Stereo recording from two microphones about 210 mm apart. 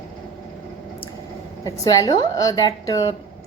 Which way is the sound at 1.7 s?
15° left (ahead or behind).